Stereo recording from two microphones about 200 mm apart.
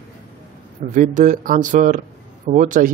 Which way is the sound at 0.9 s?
40° right (ahead or behind).